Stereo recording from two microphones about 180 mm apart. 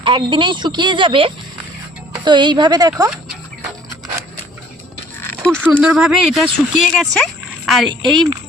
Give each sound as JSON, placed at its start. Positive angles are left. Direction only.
{"t": 0.0, "sound": "a woman's voice", "side_deg": -30}
{"t": 5.2, "sound": "a sound", "side_deg": 5}
{"t": 5.6, "sound": "a woman's voice", "side_deg": -10}